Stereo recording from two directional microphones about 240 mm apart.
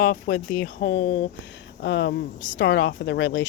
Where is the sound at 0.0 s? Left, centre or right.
Left.